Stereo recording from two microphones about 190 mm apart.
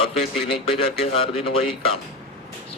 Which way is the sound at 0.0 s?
30° left (ahead or behind).